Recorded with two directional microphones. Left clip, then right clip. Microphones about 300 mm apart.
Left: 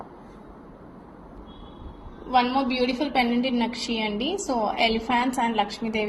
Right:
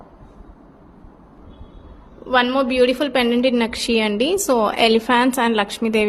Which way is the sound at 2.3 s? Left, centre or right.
Right.